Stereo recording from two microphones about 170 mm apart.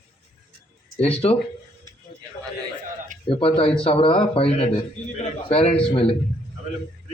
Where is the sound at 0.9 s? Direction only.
35° left (ahead or behind).